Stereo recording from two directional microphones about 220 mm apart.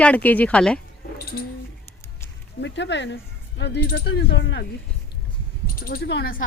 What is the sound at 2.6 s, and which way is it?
Speech, 55° left (ahead or behind).